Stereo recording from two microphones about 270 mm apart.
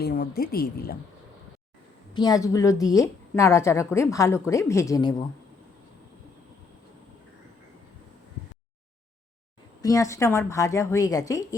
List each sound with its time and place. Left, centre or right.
0.0 s a woman's voice: left
2.1 s a woman's voice: centre
9.8 s a woman's voice: centre